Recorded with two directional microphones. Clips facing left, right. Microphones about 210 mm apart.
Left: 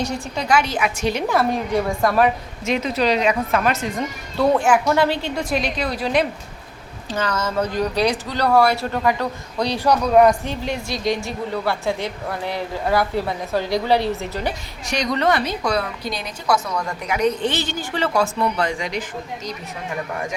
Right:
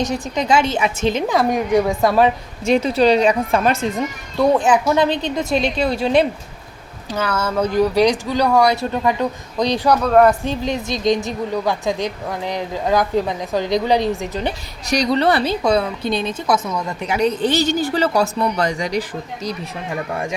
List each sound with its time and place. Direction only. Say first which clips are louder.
0.0 s a woman's voice: right 4 dB; 20° right (ahead or behind)
4.4 s a woman's voice: right 2 dB; 15° right (ahead or behind)
7.1 s a woman's voice: right 2 dB; 10° right (ahead or behind)
9.6 s speech: right 3 dB; 10° left (ahead or behind)
10.7 s a woman's voice: right 4 dB; 20° right (ahead or behind)
14.8 s a woman's voice: right 3 dB; 35° right (ahead or behind)